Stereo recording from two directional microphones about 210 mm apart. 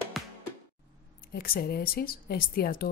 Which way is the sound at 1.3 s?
45° left (ahead or behind).